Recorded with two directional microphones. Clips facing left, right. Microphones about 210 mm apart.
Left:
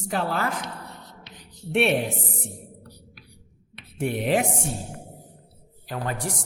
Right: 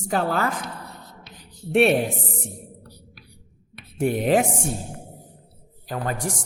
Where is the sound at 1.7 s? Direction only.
40° right (ahead or behind).